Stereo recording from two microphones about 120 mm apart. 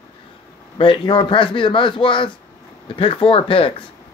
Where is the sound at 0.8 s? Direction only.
45° left (ahead or behind).